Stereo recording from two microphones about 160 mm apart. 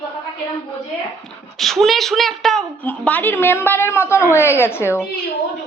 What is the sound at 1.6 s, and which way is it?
A woman's voice, centre (ahead or behind).